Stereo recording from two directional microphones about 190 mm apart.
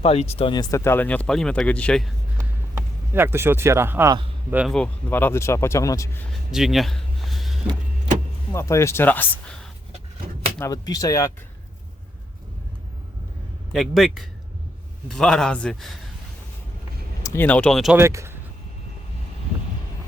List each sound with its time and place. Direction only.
0.0 s speech: 30° left (ahead or behind); by 2.0 s 5° left (ahead or behind)
2.7 s speech: 10° right (ahead or behind)
4.5 s speech: centre (ahead or behind); by 6.2 s 15° left (ahead or behind)
6.5 s a sound: centre (ahead or behind)
8.5 s speech: 15° left (ahead or behind)
10.6 s speech: 20° left (ahead or behind)
13.7 s a man's voice: centre (ahead or behind)
17.2 s speech: 10° left (ahead or behind)
17.9 s speech: 15° right (ahead or behind)